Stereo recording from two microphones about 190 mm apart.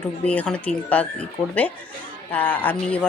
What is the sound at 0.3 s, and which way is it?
Speech, 5° left (ahead or behind).